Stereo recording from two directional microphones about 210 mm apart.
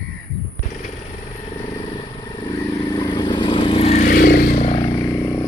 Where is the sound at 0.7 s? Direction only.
35° left (ahead or behind).